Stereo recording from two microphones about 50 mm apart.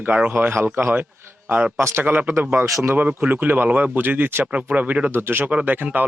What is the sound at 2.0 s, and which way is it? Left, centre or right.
A man's voice, right.